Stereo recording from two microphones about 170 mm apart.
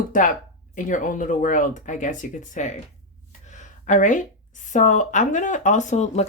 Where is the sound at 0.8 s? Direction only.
50° left (ahead or behind).